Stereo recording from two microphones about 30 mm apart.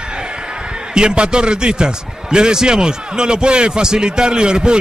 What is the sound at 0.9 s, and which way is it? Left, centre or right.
Speech, right.